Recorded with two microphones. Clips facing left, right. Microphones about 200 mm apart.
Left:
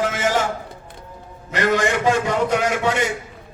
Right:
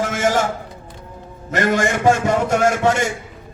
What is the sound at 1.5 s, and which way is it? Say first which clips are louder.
A man's voice: right 1 dB; 50° right (ahead or behind).